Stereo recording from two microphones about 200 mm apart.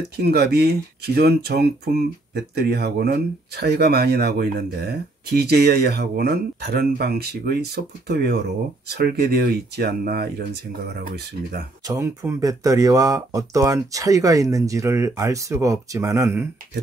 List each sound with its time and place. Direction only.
0.2 s speech: 55° right (ahead or behind)
11.9 s speech: 15° right (ahead or behind)